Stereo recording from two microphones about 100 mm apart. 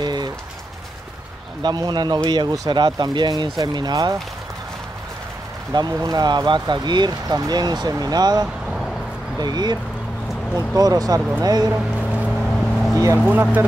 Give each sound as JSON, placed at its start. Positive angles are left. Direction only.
{"t": 0.0, "sound": "rain on surface", "side_deg": -45}
{"t": 1.6, "sound": "speech", "side_deg": -45}
{"t": 5.7, "sound": "speech", "side_deg": -45}
{"t": 8.6, "sound": "vehicle", "side_deg": 0}
{"t": 9.4, "sound": "speech", "side_deg": -45}
{"t": 12.4, "sound": "vehicle", "side_deg": 10}
{"t": 13.3, "sound": "speech", "side_deg": -20}